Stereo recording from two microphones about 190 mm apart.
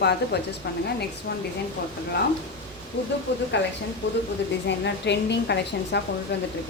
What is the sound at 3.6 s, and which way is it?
A woman's voice, 70° left (ahead or behind).